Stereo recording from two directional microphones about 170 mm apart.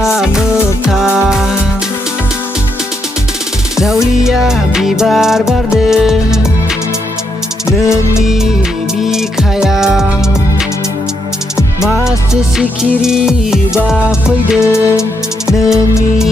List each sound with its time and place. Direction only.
0.0 s music: 5° right (ahead or behind)
3.7 s music: 5° right (ahead or behind)
8.2 s music: centre (ahead or behind)
12.5 s music: 5° right (ahead or behind)
14.6 s music: 15° left (ahead or behind)